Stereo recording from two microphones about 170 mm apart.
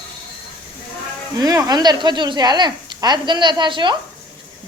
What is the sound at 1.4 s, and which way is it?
Speech, 20° right (ahead or behind).